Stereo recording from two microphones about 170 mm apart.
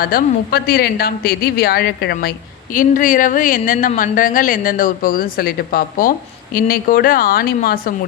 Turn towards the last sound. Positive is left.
turn(degrees=55)  # may be behind; listen again after turning